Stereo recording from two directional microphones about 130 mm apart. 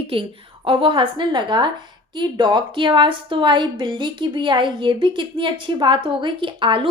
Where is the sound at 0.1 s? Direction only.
40° right (ahead or behind).